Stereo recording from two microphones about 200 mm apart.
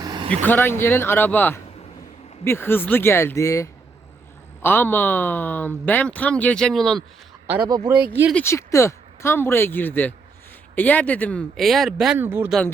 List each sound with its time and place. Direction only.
0.0 s vehicle: 20° right (ahead or behind)
0.4 s speech: 10° left (ahead or behind)
8.1 s speech: 10° right (ahead or behind)
8.4 s speech: 15° left (ahead or behind); by 12.5 s 10° right (ahead or behind)